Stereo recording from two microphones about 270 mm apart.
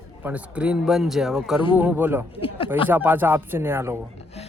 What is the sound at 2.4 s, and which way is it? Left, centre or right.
Speech, centre.